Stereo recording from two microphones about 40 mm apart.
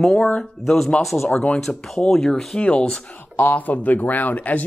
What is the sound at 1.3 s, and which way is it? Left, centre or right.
Speech, left.